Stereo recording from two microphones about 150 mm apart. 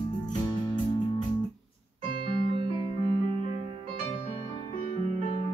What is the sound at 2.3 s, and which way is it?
Music, 35° right (ahead or behind).